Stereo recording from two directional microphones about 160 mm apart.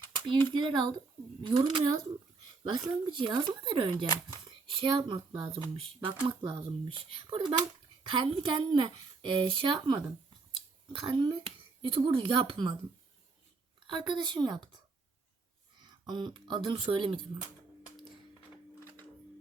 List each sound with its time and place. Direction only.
0.0 s a woman's voice: 30° right (ahead or behind)
3.2 s speech: 30° right (ahead or behind)
13.8 s a woman's voice: 30° right (ahead or behind)
15.8 s speech: 25° right (ahead or behind)